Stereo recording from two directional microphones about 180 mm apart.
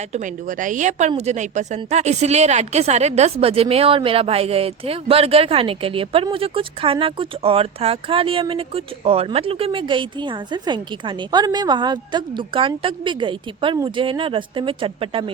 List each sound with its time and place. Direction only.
0.1 s a woman's voice: 45° right (ahead or behind)